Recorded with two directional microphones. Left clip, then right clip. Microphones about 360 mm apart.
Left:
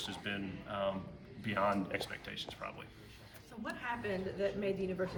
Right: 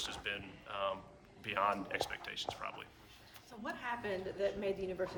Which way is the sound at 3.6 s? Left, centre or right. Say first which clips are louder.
Left 1 dB; right.